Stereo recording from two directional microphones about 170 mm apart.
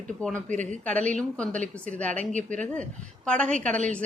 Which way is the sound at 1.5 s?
50° right (ahead or behind).